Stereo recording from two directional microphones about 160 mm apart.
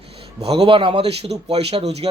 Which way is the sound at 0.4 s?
40° right (ahead or behind).